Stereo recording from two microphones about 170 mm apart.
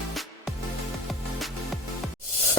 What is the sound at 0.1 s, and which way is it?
Music, centre (ahead or behind).